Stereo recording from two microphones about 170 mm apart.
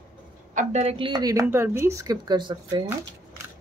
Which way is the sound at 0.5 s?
45° right (ahead or behind).